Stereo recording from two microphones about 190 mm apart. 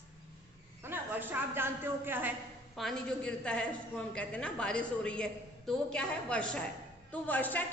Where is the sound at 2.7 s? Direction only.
Centre (ahead or behind).